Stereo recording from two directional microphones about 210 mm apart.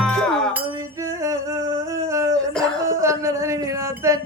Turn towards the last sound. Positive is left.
turn(degrees=-15)  # may be behind; listen again after turning